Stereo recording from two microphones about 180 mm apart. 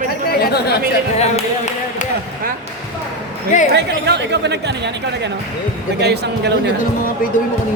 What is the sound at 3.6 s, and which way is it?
Speech, 70° right (ahead or behind).